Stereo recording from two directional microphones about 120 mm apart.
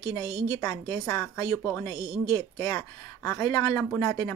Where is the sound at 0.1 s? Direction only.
35° left (ahead or behind).